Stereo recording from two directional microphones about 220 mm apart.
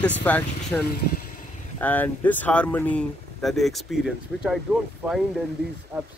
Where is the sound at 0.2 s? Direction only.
5° left (ahead or behind).